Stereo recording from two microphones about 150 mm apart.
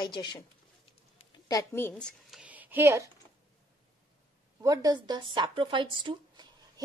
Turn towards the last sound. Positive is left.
turn(degrees=-30)  # may be behind; listen again after turning